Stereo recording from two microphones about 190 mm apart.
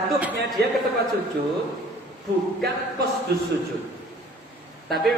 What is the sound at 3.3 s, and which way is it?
Speech, 60° right (ahead or behind).